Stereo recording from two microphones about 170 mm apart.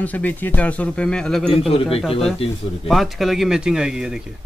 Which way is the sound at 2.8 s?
Centre (ahead or behind).